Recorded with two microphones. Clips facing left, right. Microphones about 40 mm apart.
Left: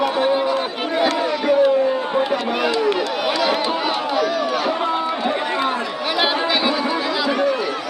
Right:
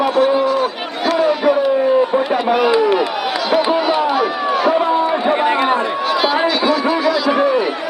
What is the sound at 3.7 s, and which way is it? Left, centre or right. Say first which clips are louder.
Run: right 6 dB; centre.